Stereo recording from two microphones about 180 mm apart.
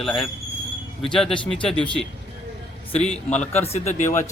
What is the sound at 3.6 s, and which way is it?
Speech, 35° left (ahead or behind).